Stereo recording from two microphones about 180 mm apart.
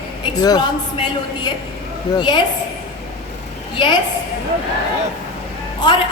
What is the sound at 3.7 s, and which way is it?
Speech, 25° left (ahead or behind).